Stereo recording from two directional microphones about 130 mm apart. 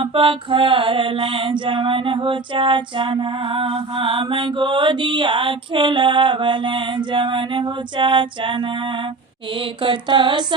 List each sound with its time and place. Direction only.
0.0 s music: 45° right (ahead or behind)